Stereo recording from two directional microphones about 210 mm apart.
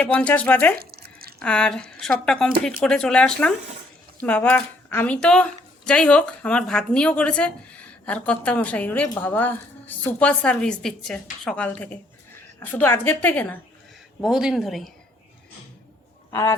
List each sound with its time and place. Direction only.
0.0 s speech: 5° left (ahead or behind)
0.8 s drip: 45° right (ahead or behind)
1.4 s speech: 5° left (ahead or behind)
14.2 s speech: centre (ahead or behind)
16.3 s speech: 10° left (ahead or behind)